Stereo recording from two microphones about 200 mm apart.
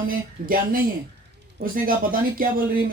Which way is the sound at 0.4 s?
45° right (ahead or behind).